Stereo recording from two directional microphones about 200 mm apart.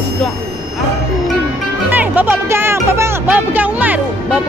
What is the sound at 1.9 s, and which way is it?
Music, 10° right (ahead or behind).